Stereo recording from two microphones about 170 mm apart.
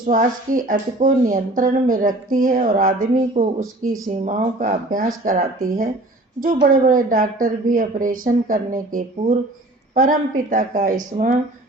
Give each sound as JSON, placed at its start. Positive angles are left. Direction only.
{"t": 0.1, "sound": "speech", "side_deg": -50}
{"t": 3.4, "sound": "speech", "side_deg": -35}
{"t": 4.1, "sound": "a woman's voice", "side_deg": -50}
{"t": 9.9, "sound": "speech", "side_deg": -50}